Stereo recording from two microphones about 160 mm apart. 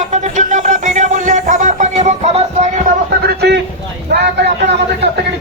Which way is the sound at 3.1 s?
90° right.